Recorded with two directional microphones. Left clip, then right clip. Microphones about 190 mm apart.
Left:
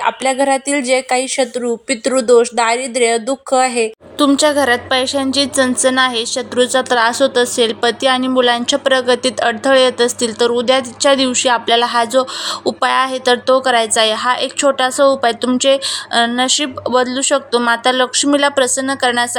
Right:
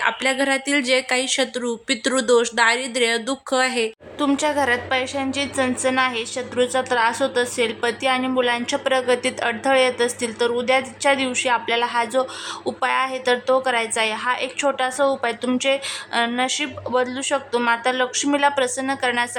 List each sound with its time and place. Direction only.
0.0 s a woman's voice: 15° left (ahead or behind)